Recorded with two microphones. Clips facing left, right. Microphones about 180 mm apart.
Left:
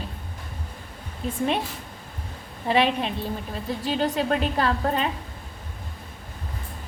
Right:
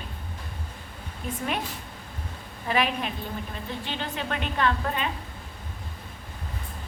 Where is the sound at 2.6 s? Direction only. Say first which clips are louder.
Left 5 dB; 30° left (ahead or behind).